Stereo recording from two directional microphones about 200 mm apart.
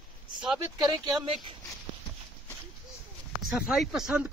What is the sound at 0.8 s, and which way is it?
Speech, 20° right (ahead or behind).